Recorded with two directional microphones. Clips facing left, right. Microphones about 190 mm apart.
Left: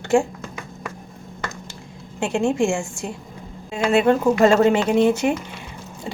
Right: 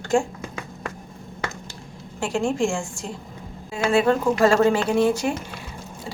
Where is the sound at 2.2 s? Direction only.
20° left (ahead or behind).